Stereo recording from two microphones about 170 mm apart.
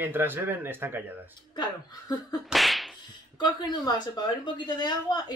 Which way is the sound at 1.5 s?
25° left (ahead or behind).